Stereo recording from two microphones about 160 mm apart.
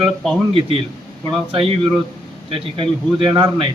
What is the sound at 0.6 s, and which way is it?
A man's voice, 35° right (ahead or behind).